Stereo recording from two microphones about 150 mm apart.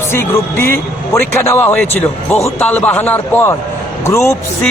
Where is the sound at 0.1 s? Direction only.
15° left (ahead or behind).